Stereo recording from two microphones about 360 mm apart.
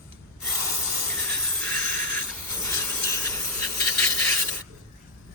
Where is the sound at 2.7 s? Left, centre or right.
Centre.